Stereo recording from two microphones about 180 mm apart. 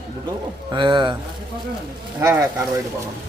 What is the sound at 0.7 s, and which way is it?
Speech, 25° right (ahead or behind).